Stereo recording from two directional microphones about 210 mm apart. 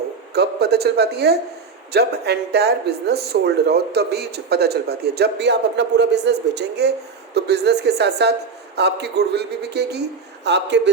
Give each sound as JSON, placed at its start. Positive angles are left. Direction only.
{"t": 0.3, "sound": "a man's voice", "side_deg": -50}